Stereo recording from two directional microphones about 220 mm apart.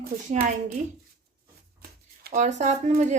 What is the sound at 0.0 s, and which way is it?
Speech, 40° right (ahead or behind).